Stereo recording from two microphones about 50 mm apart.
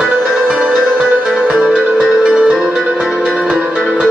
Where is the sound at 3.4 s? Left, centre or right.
Right.